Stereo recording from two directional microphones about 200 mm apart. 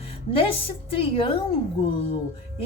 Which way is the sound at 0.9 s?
25° left (ahead or behind).